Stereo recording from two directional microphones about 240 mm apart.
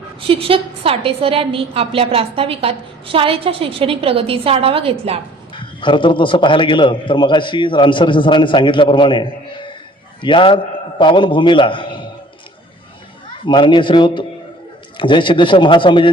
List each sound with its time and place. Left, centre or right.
0.3 s a woman's voice: right
5.5 s a man's voice: centre
13.4 s a man's voice: centre